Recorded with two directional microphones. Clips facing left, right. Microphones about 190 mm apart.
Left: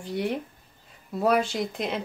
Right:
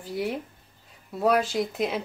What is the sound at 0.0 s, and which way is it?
Speech, centre (ahead or behind).